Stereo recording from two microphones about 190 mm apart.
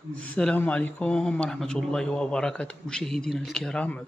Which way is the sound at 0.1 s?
5° left (ahead or behind).